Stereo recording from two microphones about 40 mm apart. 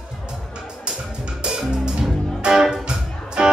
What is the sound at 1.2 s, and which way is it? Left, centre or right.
Music, right.